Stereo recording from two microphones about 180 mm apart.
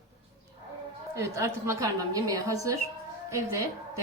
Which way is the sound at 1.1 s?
15° right (ahead or behind).